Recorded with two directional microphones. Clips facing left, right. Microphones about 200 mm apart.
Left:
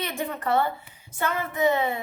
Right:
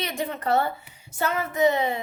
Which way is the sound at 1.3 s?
20° right (ahead or behind).